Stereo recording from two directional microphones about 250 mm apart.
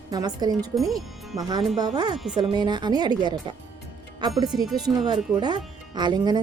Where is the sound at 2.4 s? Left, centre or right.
Centre.